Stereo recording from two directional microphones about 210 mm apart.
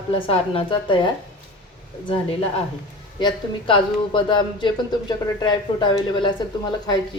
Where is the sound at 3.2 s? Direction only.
20° left (ahead or behind).